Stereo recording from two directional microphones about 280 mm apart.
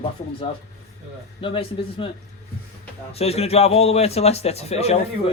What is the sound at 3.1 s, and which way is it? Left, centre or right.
A man's voice, left.